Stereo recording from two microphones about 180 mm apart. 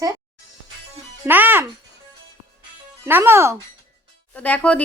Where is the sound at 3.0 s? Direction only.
15° right (ahead or behind).